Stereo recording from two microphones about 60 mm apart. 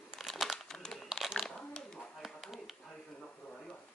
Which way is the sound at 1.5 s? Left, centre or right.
Centre.